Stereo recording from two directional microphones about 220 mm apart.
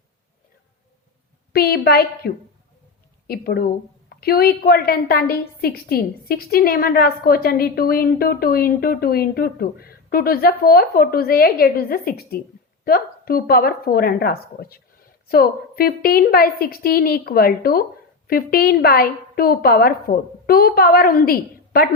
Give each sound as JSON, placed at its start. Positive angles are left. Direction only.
{"t": 1.5, "sound": "a woman's voice", "side_deg": 45}